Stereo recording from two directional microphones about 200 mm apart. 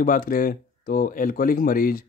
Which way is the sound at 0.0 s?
45° left (ahead or behind).